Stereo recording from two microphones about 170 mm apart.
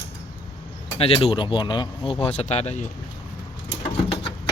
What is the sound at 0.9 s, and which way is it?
Speech, 35° left (ahead or behind).